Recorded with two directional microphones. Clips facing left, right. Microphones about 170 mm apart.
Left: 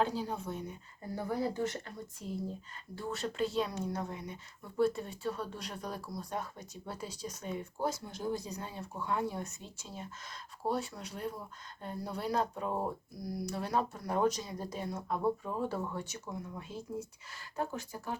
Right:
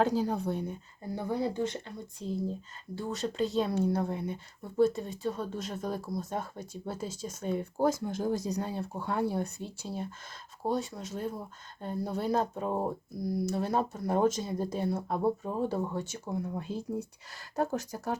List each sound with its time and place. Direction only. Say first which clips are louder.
0.0 s a woman's voice: right 6 dB; 40° right (ahead or behind)
1.1 s speech: right 3 dB; 25° right (ahead or behind)
3.6 s speech: right 6 dB; 30° right (ahead or behind)
5.2 s speech: right 4 dB; 20° right (ahead or behind)
7.9 s speech: right 6 dB; 50° right (ahead or behind); by 10.1 s 35° right (ahead or behind)
10.6 s speech: right 3 dB; 20° right (ahead or behind)
12.7 s speech: right 4 dB; 20° right (ahead or behind); by 18.2 s 40° right (ahead or behind)